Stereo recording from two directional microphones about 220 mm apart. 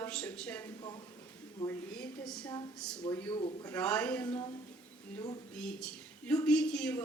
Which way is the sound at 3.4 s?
25° left (ahead or behind).